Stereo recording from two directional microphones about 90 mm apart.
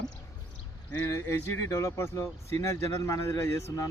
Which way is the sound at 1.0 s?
35° left (ahead or behind).